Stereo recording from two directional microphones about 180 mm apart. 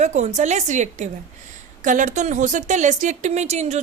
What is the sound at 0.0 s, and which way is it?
A woman's voice, 40° right (ahead or behind).